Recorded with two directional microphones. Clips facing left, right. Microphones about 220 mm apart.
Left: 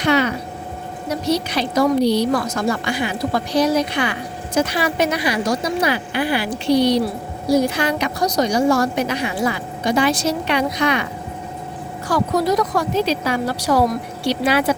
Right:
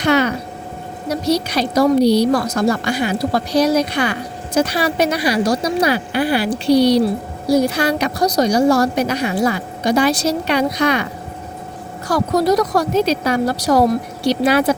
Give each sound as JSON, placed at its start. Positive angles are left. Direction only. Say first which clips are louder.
{"t": 0.0, "sound": "a sound", "louder": "right 2 dB", "side_deg": -40}
{"t": 1.2, "sound": "a woman's voice", "louder": "right 3 dB", "side_deg": -40}
{"t": 12.0, "sound": "a woman's voice", "louder": "right 3 dB", "side_deg": -40}